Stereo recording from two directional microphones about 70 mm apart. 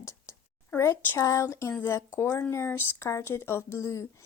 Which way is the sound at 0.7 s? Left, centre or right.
Left.